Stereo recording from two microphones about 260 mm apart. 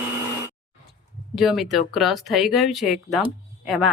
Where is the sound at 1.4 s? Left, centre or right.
Centre.